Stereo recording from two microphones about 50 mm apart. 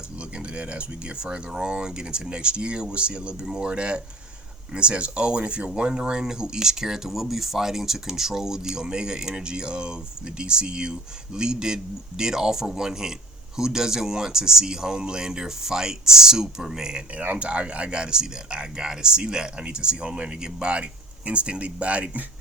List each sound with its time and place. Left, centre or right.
0.3 s speech: right
17.3 s speech: right